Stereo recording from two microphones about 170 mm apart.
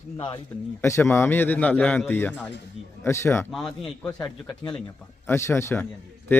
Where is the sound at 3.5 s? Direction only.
Centre (ahead or behind).